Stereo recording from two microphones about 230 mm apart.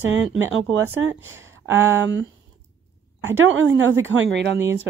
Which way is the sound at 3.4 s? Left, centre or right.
Right.